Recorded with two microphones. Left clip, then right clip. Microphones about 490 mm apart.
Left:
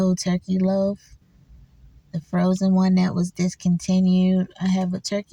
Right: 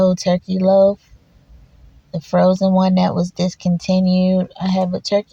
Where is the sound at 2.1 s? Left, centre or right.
Left.